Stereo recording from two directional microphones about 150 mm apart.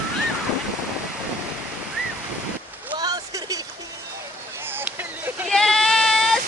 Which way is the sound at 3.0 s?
25° right (ahead or behind).